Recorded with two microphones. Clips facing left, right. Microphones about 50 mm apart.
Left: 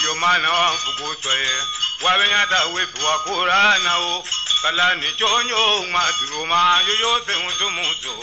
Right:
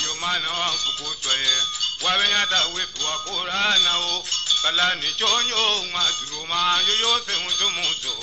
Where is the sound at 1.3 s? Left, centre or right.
Left.